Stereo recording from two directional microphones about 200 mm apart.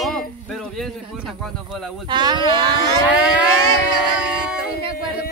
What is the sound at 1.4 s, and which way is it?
Speech, centre (ahead or behind).